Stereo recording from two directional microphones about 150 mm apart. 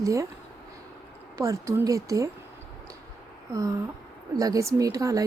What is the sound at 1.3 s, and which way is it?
Speech, 20° right (ahead or behind).